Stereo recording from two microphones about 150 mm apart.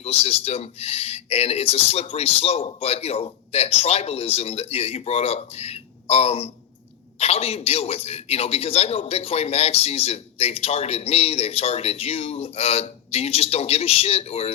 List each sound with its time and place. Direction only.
0.0 s a man's voice: 40° left (ahead or behind)